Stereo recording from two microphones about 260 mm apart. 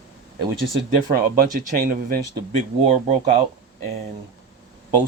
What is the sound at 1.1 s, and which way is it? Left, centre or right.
Speech, right.